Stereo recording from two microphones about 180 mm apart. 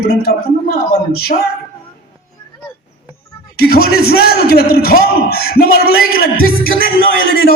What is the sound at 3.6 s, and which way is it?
A man's voice, 60° left (ahead or behind).